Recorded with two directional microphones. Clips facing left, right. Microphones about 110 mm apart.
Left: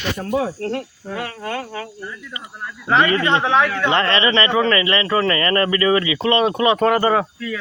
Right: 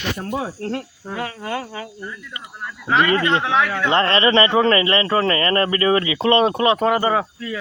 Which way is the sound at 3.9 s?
35° right (ahead or behind).